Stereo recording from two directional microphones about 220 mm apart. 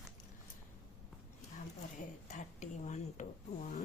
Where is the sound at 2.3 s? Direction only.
35° left (ahead or behind).